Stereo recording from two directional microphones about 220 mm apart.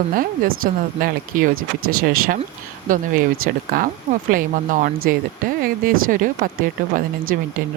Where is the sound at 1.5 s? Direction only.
75° right (ahead or behind).